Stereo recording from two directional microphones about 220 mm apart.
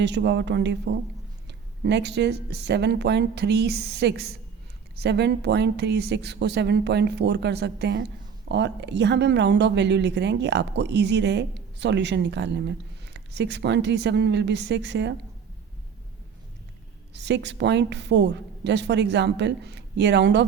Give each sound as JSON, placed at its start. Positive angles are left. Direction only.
{"t": 0.0, "sound": "speech", "side_deg": -50}
{"t": 17.2, "sound": "speech", "side_deg": -50}